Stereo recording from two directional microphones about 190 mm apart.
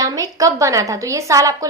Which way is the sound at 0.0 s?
15° right (ahead or behind).